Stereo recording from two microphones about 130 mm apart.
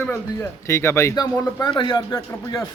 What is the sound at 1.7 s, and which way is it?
Speech, 40° left (ahead or behind).